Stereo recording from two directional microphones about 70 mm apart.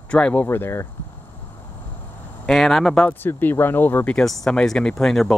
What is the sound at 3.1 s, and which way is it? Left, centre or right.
Speech, left.